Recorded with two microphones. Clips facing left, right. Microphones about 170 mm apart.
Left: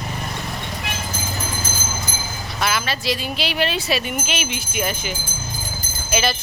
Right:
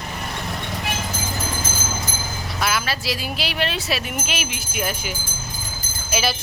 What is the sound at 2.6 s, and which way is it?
Speech, 5° right (ahead or behind).